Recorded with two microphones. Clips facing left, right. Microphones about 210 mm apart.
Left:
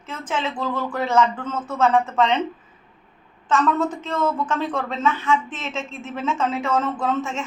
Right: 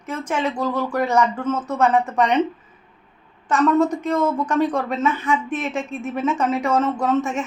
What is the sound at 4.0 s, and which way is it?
A woman's voice, 15° right (ahead or behind).